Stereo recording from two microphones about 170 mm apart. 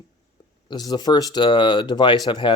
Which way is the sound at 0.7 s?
25° left (ahead or behind).